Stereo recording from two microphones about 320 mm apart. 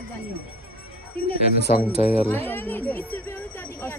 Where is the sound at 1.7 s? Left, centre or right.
Left.